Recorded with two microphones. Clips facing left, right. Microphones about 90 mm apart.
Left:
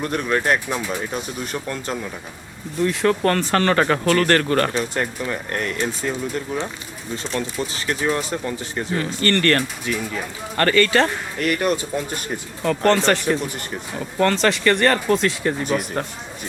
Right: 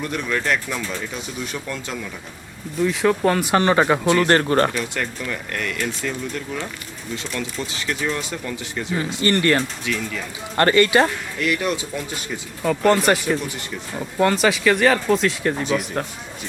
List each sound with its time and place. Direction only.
0.0 s speech: 45° left (ahead or behind)
2.7 s speech: centre (ahead or behind)
4.1 s speech: 20° right (ahead or behind)
4.7 s speech: 30° left (ahead or behind)
8.1 s speech: 40° left (ahead or behind)
9.2 s speech: 10° right (ahead or behind)
9.9 s speech: 35° left (ahead or behind)
10.6 s speech: 20° right (ahead or behind)
11.3 s speech: 45° left (ahead or behind)
12.6 s speech: 10° right (ahead or behind)